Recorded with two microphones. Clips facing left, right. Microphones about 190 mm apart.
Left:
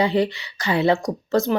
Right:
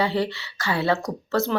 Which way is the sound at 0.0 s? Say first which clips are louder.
Left 4 dB; 15° left (ahead or behind).